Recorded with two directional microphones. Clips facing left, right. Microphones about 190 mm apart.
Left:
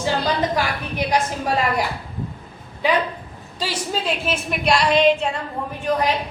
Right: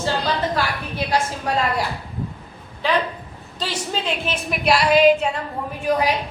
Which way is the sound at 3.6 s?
5° left (ahead or behind).